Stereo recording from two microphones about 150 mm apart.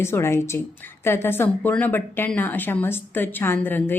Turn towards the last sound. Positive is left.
turn(degrees=15)  # may be behind; listen again after turning